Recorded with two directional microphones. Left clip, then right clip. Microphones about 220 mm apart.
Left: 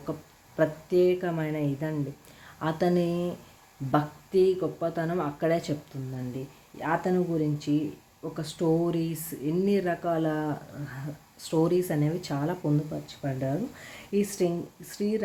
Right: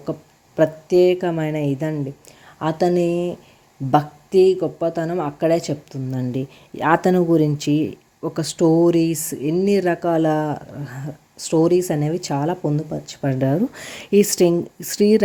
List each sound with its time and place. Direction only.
0.5 s speech: 25° right (ahead or behind)
6.7 s speech: 40° right (ahead or behind)